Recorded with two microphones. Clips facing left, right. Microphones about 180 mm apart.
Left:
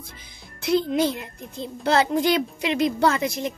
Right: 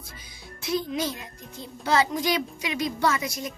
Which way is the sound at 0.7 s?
60° left (ahead or behind).